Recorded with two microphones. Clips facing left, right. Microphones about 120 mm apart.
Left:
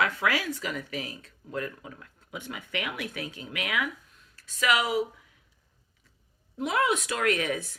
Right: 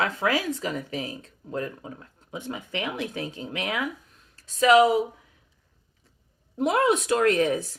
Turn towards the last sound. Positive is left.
turn(degrees=-30)  # may be behind; listen again after turning